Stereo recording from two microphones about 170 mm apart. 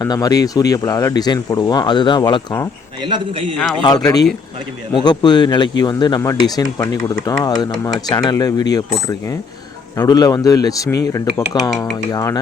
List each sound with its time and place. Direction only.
0.0 s speech: 20° left (ahead or behind)
3.0 s a man's voice: 25° right (ahead or behind)
3.8 s speech: 20° left (ahead or behind)
10.0 s speech: 20° left (ahead or behind)